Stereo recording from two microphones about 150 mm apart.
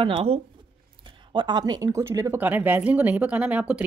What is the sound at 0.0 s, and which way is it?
Speech, 40° right (ahead or behind).